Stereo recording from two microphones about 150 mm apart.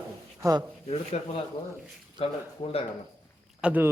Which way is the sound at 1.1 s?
45° left (ahead or behind).